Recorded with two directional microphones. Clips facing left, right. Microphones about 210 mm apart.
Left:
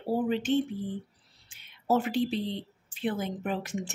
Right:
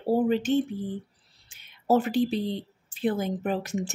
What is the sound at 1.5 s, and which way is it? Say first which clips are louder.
A woman's voice: right 4 dB; 40° right (ahead or behind).